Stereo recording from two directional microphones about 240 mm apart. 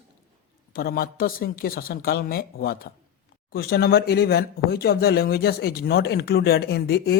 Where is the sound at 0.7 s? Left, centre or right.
Left.